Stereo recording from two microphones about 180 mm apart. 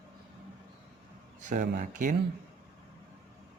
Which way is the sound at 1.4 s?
45° right (ahead or behind).